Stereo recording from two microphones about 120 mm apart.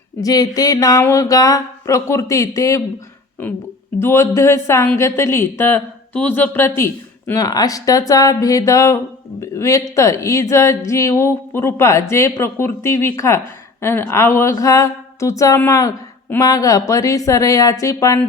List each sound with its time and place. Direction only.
0.2 s a woman's voice: 30° left (ahead or behind)
3.4 s a woman's voice: 15° left (ahead or behind)